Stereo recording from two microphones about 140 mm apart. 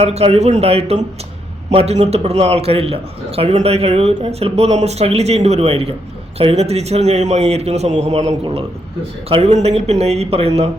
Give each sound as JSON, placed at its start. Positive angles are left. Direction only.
{"t": 0.0, "sound": "a man's voice", "side_deg": -50}